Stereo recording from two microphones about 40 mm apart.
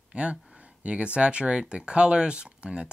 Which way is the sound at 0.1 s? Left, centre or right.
Right.